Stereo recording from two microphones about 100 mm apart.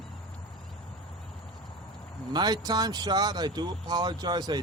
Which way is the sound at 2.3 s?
45° right (ahead or behind).